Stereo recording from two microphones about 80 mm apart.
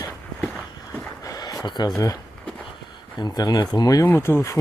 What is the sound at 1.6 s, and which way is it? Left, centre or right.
Speech, left.